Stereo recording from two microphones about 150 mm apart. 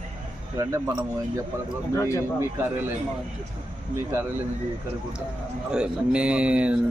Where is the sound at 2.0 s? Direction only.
20° left (ahead or behind).